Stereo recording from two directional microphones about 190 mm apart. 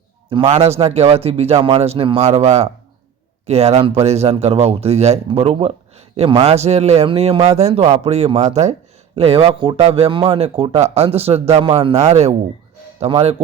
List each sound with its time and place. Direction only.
0.3 s a man's voice: 30° right (ahead or behind)